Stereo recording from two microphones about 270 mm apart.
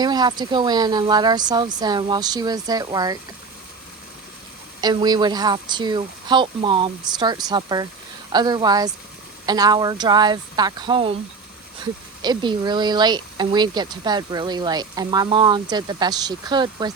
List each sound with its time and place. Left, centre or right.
0.0 s speech: centre
4.8 s speech: centre
12.2 s speech: centre